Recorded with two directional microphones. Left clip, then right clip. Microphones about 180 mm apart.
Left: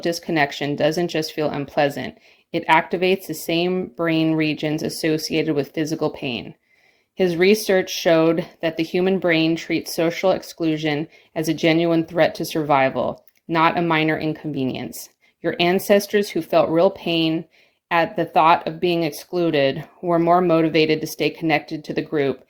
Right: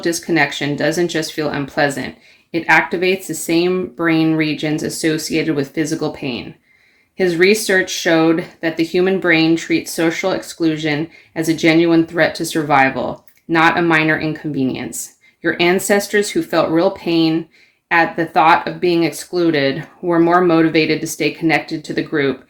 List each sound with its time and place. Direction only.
0.0 s speech: 40° left (ahead or behind)